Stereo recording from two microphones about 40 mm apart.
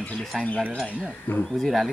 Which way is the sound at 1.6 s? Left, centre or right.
Centre.